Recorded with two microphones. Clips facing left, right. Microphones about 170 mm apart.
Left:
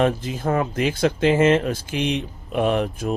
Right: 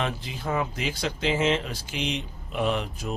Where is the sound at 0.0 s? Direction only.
45° left (ahead or behind).